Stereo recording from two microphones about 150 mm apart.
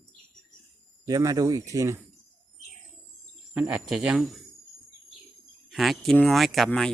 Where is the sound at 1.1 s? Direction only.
25° right (ahead or behind).